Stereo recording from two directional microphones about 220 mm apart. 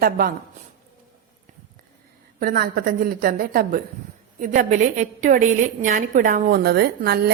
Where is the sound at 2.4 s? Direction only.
40° right (ahead or behind).